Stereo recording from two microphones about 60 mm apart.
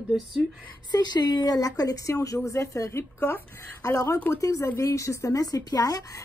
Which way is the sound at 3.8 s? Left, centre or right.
Left.